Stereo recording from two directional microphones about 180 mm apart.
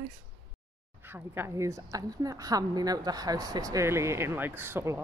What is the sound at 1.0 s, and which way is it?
A woman's voice, 10° right (ahead or behind).